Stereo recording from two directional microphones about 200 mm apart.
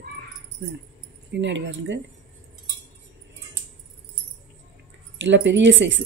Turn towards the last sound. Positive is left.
turn(degrees=-65)  # may be behind; listen again after turning